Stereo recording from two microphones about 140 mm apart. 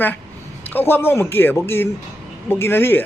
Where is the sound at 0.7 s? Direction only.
15° left (ahead or behind).